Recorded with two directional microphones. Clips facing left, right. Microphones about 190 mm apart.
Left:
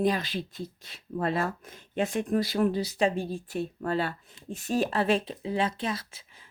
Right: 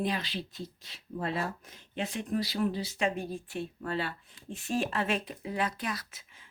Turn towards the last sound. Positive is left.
turn(degrees=30)  # may be behind; listen again after turning